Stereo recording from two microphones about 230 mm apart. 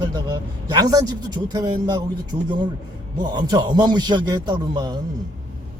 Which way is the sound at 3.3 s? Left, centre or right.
Centre.